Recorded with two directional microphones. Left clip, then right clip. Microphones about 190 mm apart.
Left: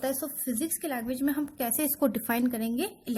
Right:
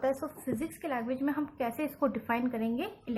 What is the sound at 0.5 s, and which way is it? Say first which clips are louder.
A woman's voice: left 2 dB; 65° left (ahead or behind).